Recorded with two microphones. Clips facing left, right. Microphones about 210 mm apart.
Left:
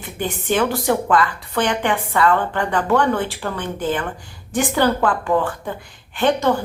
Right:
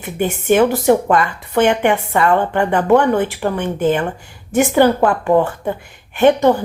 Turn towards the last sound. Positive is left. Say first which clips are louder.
# right 6 dB
turn(degrees=-20)  # may be behind; listen again after turning